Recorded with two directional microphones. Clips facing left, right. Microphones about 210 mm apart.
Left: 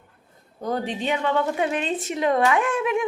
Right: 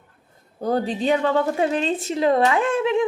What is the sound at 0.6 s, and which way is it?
A woman's voice, 35° right (ahead or behind).